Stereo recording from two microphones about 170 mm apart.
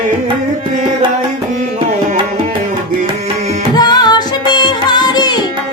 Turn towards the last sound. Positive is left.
turn(degrees=25)  # may be behind; listen again after turning